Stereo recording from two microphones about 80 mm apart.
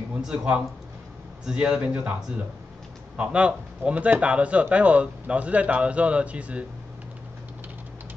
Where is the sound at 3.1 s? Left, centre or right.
Centre.